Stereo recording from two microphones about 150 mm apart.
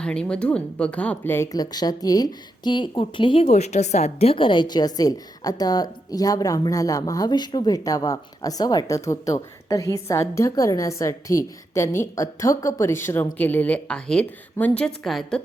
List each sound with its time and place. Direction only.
0.0 s speech: 5° left (ahead or behind)
1.5 s a woman's voice: 25° left (ahead or behind)
3.4 s a woman's voice: 50° left (ahead or behind); by 15.4 s 5° left (ahead or behind)